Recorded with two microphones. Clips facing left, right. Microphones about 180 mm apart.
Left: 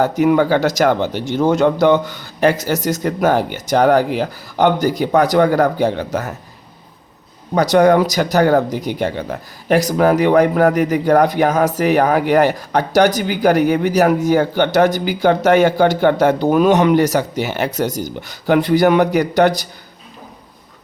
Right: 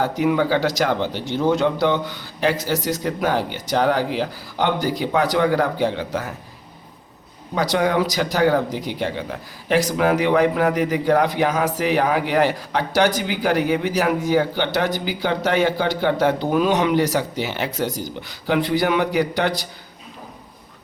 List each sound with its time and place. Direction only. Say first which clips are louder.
0.0 s speech: left 6 dB; 45° left (ahead or behind)
7.5 s speech: left 8 dB; 45° left (ahead or behind)